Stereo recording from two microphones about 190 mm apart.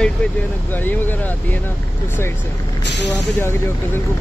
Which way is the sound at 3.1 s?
15° left (ahead or behind).